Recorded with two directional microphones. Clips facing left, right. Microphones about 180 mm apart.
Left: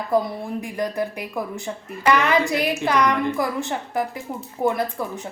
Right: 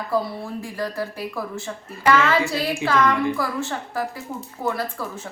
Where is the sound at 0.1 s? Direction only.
20° left (ahead or behind).